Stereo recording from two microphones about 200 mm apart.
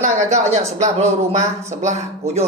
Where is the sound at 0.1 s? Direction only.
35° right (ahead or behind).